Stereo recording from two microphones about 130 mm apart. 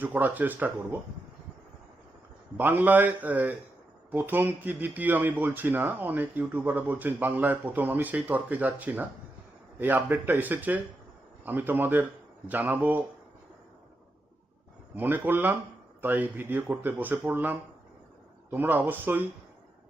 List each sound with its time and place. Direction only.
0.0 s speech: 15° right (ahead or behind)
2.6 s speech: 15° right (ahead or behind)
14.9 s speech: 15° right (ahead or behind)